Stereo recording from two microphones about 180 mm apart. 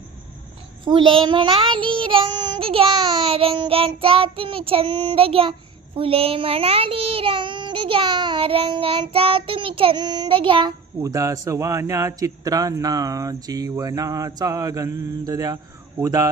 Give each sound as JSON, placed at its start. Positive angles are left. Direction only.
{"t": 0.9, "sound": "child singing", "side_deg": -30}